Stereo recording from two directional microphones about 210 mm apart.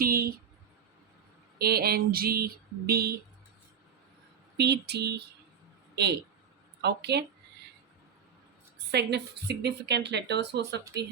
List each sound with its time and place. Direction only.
0.0 s a sound: 45° right (ahead or behind)
1.5 s a woman's voice: 50° right (ahead or behind)
4.5 s a woman's voice: 50° right (ahead or behind)
8.9 s a woman's voice: 55° right (ahead or behind)